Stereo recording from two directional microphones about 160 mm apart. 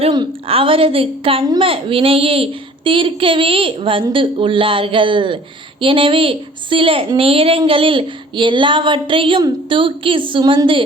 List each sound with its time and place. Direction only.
0.1 s a woman's voice: 30° right (ahead or behind)